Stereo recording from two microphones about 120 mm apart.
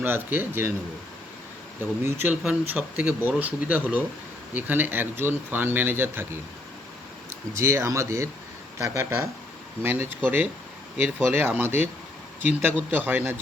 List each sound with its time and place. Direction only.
0.0 s speech: 15° right (ahead or behind)
1.8 s speech: 15° right (ahead or behind)
7.5 s speech: 25° right (ahead or behind)
9.8 s speech: 15° right (ahead or behind)